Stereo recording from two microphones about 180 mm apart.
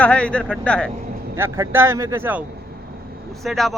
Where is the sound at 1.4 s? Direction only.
15° right (ahead or behind).